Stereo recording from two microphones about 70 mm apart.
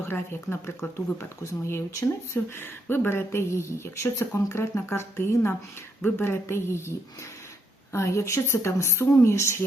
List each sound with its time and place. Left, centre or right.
0.0 s speech: left
7.9 s speech: left